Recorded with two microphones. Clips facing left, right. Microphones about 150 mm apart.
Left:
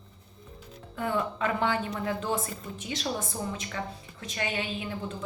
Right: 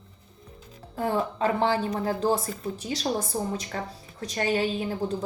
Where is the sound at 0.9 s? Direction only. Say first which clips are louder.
Right 3 dB; 35° right (ahead or behind).